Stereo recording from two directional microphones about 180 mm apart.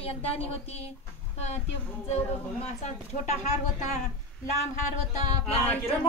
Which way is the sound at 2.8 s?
40° left (ahead or behind).